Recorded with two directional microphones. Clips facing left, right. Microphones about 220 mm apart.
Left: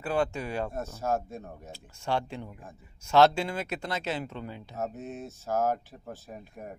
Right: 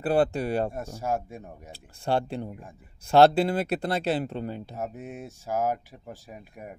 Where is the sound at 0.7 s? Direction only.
10° right (ahead or behind).